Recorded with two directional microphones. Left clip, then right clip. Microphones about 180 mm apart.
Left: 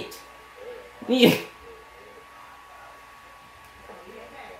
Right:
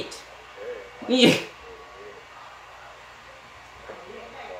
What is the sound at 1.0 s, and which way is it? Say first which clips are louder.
Speech: even; 30° left (ahead or behind).